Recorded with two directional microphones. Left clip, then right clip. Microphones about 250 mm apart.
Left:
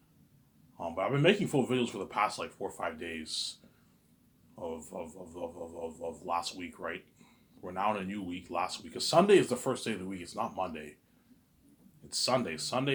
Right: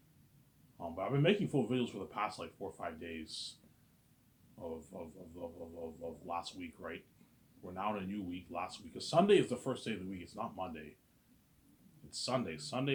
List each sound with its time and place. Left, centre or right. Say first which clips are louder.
0.8 s speech: left 6 dB; left
4.6 s speech: left 6 dB; left
12.1 s speech: left 7 dB; left